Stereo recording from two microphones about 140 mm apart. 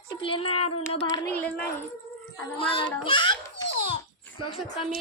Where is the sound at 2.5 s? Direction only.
40° left (ahead or behind).